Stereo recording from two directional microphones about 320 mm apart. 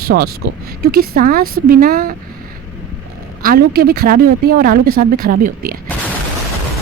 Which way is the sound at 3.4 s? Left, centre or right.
Right.